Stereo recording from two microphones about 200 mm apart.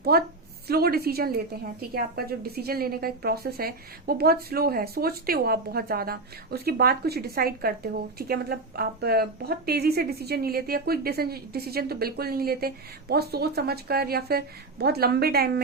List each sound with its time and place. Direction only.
0.0 s a woman's voice: 50° right (ahead or behind)